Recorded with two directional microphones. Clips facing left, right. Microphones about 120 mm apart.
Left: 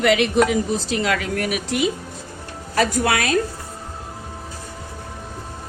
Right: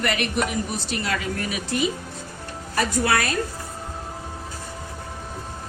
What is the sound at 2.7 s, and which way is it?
Speech, 90° left.